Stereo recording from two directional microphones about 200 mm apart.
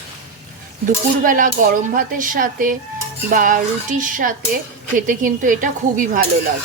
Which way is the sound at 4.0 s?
40° right (ahead or behind).